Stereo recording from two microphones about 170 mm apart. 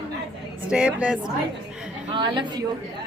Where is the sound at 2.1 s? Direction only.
25° right (ahead or behind).